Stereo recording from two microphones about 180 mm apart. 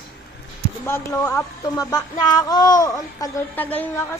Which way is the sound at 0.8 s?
15° left (ahead or behind).